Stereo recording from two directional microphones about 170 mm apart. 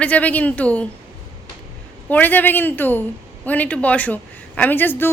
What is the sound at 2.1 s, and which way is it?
A woman's voice, 10° left (ahead or behind).